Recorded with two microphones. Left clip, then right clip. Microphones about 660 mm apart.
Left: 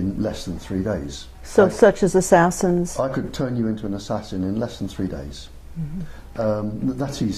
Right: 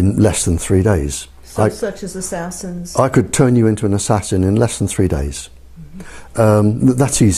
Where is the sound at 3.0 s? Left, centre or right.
Right.